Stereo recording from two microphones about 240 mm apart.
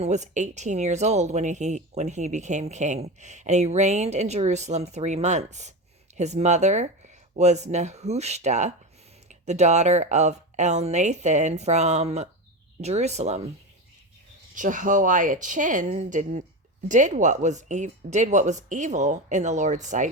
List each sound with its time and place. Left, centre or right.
0.0 s speech: right
14.5 s speech: right